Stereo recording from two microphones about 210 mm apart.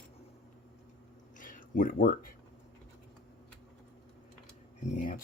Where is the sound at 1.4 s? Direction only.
40° left (ahead or behind).